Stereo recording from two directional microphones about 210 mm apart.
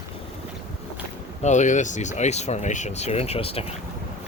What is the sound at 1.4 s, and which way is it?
Speech, 35° left (ahead or behind).